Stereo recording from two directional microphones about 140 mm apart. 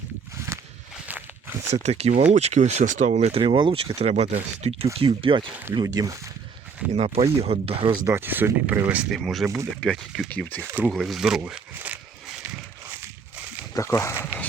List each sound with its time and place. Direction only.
1.0 s a sound: 10° right (ahead or behind)
1.7 s speech: 50° right (ahead or behind)
3.4 s speech: 40° right (ahead or behind)
4.9 s speech: 40° right (ahead or behind)
5.7 s speech: 25° right (ahead or behind)
6.9 s speech: 45° right (ahead or behind)
8.0 s speech: 15° right (ahead or behind)
9.1 s speech: centre (ahead or behind)
10.6 s speech: 20° right (ahead or behind)
10.8 s speech: centre (ahead or behind)
13.0 s a sound: 15° right (ahead or behind)
13.7 s speech: 20° left (ahead or behind)
14.1 s speech: 10° right (ahead or behind)